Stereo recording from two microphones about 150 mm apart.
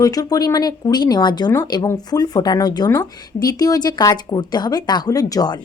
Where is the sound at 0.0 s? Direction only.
25° left (ahead or behind).